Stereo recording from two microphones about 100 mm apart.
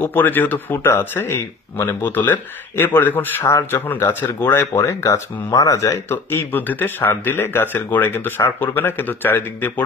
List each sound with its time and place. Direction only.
0.0 s speech: 20° left (ahead or behind)